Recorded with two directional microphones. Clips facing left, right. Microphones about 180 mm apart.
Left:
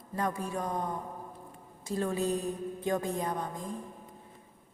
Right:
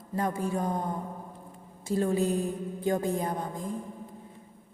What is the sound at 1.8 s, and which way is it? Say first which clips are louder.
Speech: right 4 dB; 30° right (ahead or behind).